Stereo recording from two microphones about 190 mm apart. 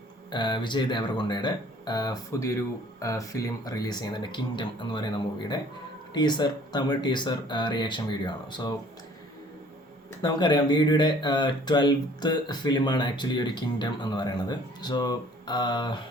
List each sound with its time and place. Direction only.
0.3 s speech: 25° left (ahead or behind)
10.2 s speech: 20° left (ahead or behind)